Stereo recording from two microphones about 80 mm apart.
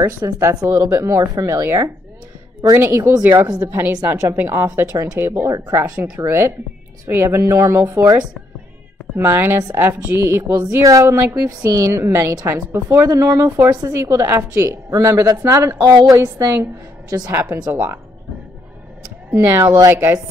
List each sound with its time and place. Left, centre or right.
0.0 s a woman's voice: right
9.1 s a woman's voice: right
10.9 s speech: right
11.1 s a woman's voice: right
11.6 s a woman's voice: right
19.3 s a woman's voice: right